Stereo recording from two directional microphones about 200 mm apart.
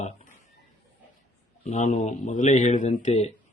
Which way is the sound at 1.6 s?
35° left (ahead or behind).